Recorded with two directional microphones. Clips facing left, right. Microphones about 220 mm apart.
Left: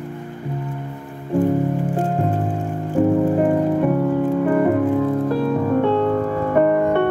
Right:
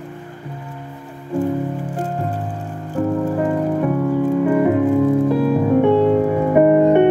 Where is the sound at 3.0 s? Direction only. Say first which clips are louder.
Left 3 dB; 15° left (ahead or behind).